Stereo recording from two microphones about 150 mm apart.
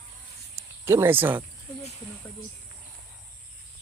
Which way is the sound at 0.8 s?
15° right (ahead or behind).